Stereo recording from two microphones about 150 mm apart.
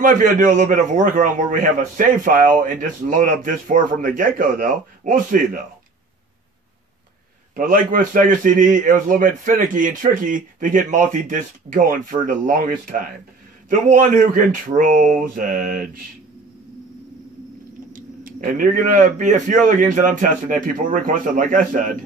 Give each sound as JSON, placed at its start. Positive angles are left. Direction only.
{"t": 0.0, "sound": "a man's voice", "side_deg": -60}
{"t": 7.5, "sound": "a man's voice", "side_deg": -65}
{"t": 14.8, "sound": "mantra", "side_deg": -65}
{"t": 17.9, "sound": "a man's voice", "side_deg": -65}